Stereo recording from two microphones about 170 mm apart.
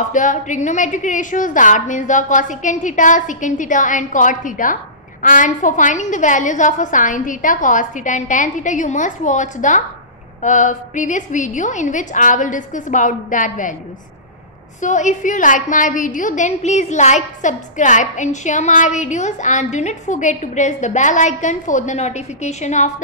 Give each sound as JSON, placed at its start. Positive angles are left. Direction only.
{"t": 0.1, "sound": "a woman's voice", "side_deg": 45}
{"t": 14.8, "sound": "a woman's voice", "side_deg": 45}